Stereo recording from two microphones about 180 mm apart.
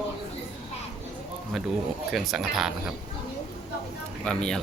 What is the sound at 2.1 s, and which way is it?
Speech, centre (ahead or behind).